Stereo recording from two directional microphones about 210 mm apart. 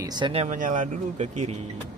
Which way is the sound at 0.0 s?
20° right (ahead or behind).